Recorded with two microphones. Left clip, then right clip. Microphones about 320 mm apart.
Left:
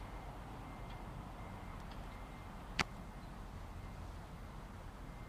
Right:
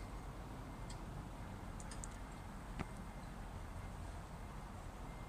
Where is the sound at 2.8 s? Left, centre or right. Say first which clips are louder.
Left 13 dB; left.